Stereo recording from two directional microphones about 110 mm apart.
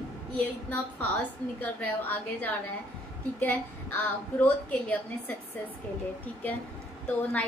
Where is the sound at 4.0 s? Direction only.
15° left (ahead or behind).